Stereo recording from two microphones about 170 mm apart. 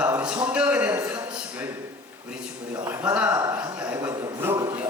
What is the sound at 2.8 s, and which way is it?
Speech, 10° right (ahead or behind).